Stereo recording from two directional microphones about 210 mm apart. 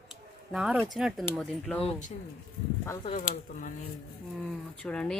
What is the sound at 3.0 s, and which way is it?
Speech, 25° left (ahead or behind).